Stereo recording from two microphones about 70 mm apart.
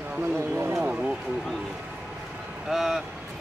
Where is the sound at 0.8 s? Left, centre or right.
Centre.